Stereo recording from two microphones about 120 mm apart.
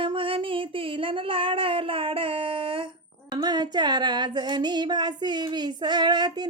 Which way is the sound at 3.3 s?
35° right (ahead or behind).